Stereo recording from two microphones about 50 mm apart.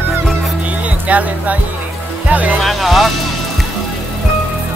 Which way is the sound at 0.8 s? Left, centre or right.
Right.